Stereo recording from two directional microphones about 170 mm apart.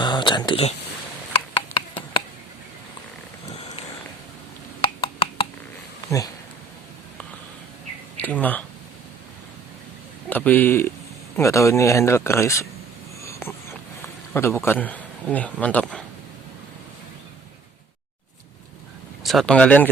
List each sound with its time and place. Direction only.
0.0 s speech: 25° left (ahead or behind)
1.3 s a sound: 30° left (ahead or behind)
6.1 s speech: 20° left (ahead or behind)
8.1 s speech: 10° left (ahead or behind)
10.2 s speech: 10° left (ahead or behind)
13.2 s a sound: 15° left (ahead or behind)
14.3 s speech: 15° left (ahead or behind)
19.2 s speech: centre (ahead or behind)